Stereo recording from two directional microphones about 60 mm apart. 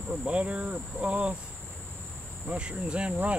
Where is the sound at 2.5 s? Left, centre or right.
Centre.